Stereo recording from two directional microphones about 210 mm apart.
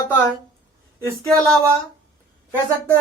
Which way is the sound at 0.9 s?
15° right (ahead or behind).